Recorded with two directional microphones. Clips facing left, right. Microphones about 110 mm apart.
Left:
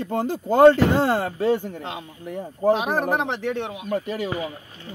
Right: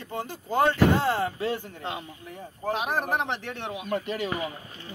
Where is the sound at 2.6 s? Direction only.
25° left (ahead or behind).